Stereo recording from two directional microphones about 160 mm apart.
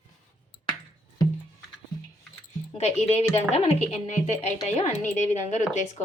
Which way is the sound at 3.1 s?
40° left (ahead or behind).